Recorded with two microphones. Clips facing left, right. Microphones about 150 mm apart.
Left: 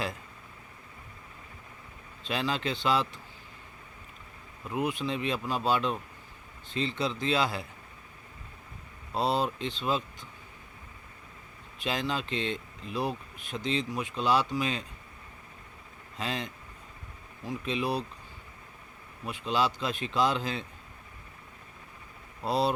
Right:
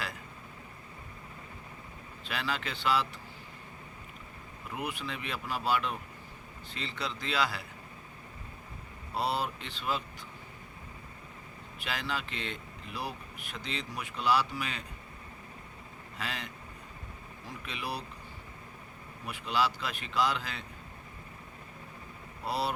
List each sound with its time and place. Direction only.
2.2 s speech: 25° left (ahead or behind)
4.7 s speech: 25° left (ahead or behind)
9.1 s speech: 25° left (ahead or behind)
11.8 s speech: 25° left (ahead or behind)
16.1 s speech: 25° left (ahead or behind)
17.7 s speech: 25° left (ahead or behind)
19.2 s speech: 25° left (ahead or behind)
22.4 s speech: 25° left (ahead or behind)